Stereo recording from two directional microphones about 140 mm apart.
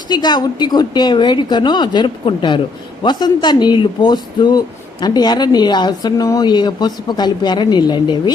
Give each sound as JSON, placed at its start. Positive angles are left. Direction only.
{"t": 0.1, "sound": "speech", "side_deg": 30}